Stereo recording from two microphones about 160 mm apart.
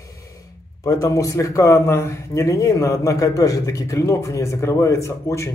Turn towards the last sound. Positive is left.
turn(degrees=20)  # may be behind; listen again after turning